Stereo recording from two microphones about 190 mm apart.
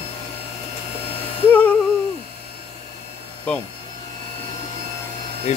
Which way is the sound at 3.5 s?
5° left (ahead or behind).